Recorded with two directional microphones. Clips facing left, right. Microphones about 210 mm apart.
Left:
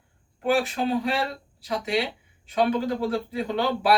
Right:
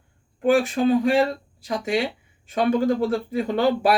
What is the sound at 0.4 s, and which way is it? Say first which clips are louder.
Speech: right 5 dB; 50° right (ahead or behind).